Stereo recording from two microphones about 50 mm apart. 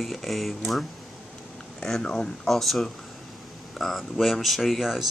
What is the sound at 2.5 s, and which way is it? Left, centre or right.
Speech, centre.